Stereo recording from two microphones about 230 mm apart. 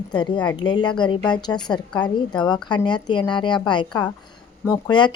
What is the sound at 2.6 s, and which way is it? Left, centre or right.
Speech, centre.